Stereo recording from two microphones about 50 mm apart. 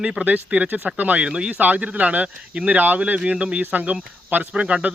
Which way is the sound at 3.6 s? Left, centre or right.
Right.